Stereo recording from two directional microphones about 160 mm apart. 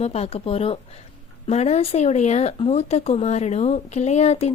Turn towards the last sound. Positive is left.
turn(degrees=40)  # may be behind; listen again after turning